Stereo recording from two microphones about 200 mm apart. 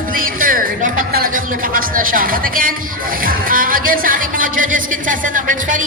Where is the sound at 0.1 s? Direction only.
45° right (ahead or behind).